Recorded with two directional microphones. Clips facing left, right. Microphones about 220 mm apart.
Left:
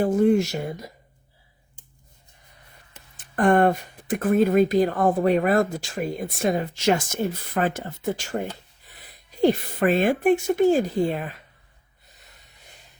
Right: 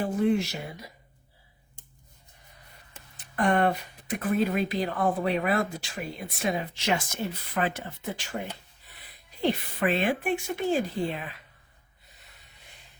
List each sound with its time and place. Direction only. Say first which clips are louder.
0.0 s speech: left 6 dB; 45° left (ahead or behind)
3.2 s speech: left 6 dB; 50° left (ahead or behind)